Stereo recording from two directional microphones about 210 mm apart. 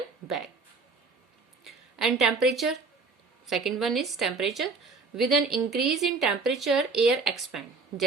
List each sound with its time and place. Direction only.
0.3 s a woman's voice: centre (ahead or behind)
1.6 s a woman's voice: centre (ahead or behind)